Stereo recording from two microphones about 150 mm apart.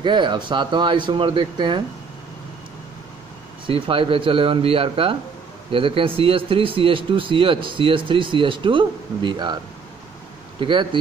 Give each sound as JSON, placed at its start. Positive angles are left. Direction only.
{"t": 0.0, "sound": "speech", "side_deg": -30}
{"t": 3.6, "sound": "speech", "side_deg": -35}
{"t": 10.6, "sound": "speech", "side_deg": -35}